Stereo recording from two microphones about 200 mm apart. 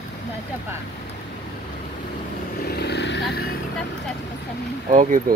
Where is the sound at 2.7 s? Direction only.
55° left (ahead or behind).